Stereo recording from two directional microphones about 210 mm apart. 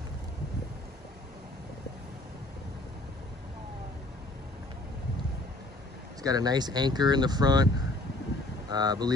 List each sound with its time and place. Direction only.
6.2 s speech: 20° right (ahead or behind)